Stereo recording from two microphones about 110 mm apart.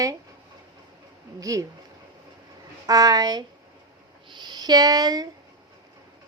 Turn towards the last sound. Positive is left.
turn(degrees=-35)  # may be behind; listen again after turning